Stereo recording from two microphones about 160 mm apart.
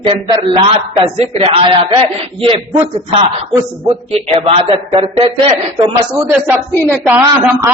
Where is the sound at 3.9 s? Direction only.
35° right (ahead or behind).